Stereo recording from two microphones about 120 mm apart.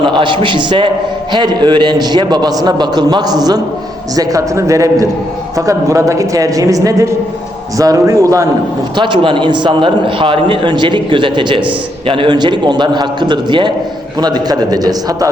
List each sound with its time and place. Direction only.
0.0 s a man's voice: 40° right (ahead or behind); by 8.4 s 25° right (ahead or behind)
9.0 s a man's voice: 40° right (ahead or behind)